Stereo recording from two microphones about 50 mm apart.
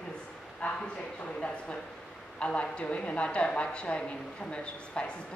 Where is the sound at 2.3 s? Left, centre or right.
Left.